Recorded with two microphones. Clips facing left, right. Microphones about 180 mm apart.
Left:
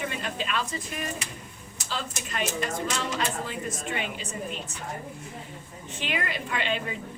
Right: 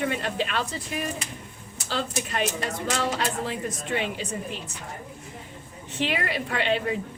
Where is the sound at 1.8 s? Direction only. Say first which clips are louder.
Right 6 dB; 65° right (ahead or behind).